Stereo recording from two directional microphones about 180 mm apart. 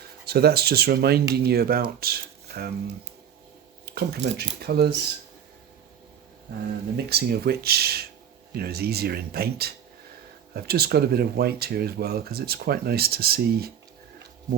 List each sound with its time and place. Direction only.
0.3 s speech: 60° right (ahead or behind)
3.8 s speech: 60° right (ahead or behind)
6.9 s speech: 60° right (ahead or behind)